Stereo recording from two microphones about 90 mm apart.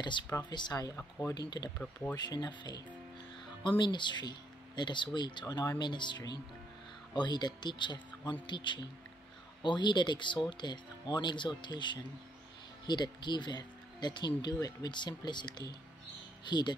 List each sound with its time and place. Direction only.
0.5 s speech: 55° left (ahead or behind)
1.8 s speech: 15° left (ahead or behind)
2.1 s speech: 55° left (ahead or behind)